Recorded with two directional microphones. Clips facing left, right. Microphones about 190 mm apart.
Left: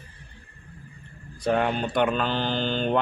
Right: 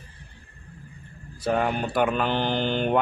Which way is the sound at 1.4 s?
5° right (ahead or behind).